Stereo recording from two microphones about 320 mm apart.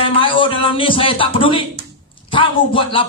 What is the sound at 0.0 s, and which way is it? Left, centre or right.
Speech, centre.